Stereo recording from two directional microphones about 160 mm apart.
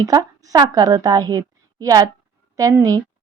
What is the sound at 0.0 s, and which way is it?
A woman's voice, 20° right (ahead or behind).